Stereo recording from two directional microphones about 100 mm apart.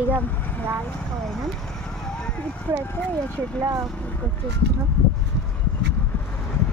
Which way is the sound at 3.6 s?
35° right (ahead or behind).